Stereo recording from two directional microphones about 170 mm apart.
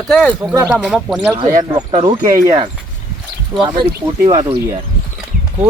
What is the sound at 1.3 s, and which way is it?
Speech, 30° right (ahead or behind).